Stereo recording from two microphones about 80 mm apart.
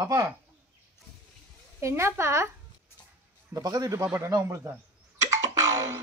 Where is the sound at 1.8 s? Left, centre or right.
Right.